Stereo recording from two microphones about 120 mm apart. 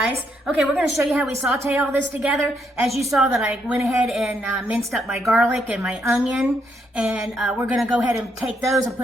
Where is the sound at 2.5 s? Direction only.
Centre (ahead or behind).